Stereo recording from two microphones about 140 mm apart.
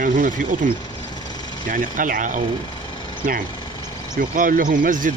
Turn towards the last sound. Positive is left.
turn(degrees=-70)  # may be behind; listen again after turning